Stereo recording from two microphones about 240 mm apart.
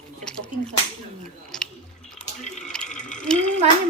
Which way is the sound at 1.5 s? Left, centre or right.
Centre.